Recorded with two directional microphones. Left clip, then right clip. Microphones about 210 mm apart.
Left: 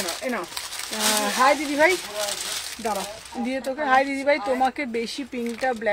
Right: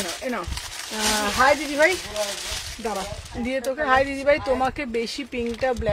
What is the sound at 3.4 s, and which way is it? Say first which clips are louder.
Speech: right 2 dB; 20° right (ahead or behind).